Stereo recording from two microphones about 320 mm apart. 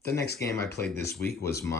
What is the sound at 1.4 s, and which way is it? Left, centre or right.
Speech, centre.